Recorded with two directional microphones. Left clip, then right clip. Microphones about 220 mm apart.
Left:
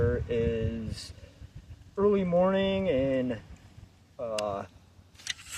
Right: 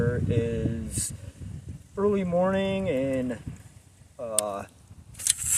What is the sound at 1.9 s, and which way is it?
Speech, 5° right (ahead or behind).